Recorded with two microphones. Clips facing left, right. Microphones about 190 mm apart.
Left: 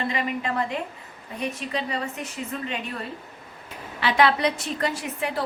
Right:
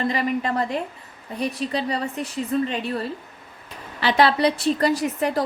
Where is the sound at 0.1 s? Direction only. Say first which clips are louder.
Right 4 dB; 35° right (ahead or behind).